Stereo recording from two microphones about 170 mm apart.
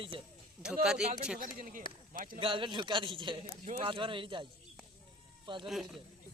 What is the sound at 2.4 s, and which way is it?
Speech, 30° right (ahead or behind).